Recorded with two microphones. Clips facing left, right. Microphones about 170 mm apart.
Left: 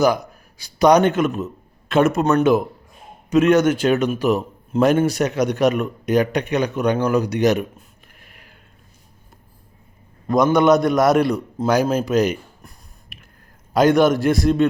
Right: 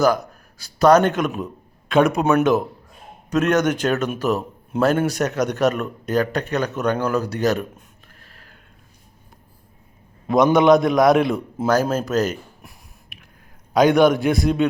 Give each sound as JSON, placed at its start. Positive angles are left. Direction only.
{"t": 0.0, "sound": "a man's voice", "side_deg": 10}
{"t": 7.8, "sound": "a sound", "side_deg": 10}
{"t": 10.2, "sound": "a man's voice", "side_deg": 0}
{"t": 11.7, "sound": "a man's voice", "side_deg": 15}
{"t": 12.6, "sound": "a sound", "side_deg": 0}
{"t": 13.7, "sound": "a man's voice", "side_deg": 0}